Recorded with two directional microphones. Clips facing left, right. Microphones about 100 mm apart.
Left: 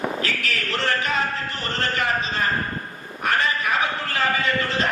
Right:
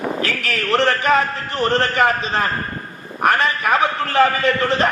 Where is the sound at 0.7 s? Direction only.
55° right (ahead or behind).